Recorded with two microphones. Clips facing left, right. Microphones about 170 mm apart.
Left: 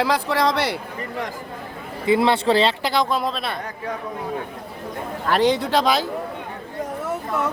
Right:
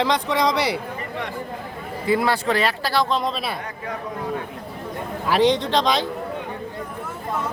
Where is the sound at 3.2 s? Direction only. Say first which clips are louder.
Even; centre (ahead or behind).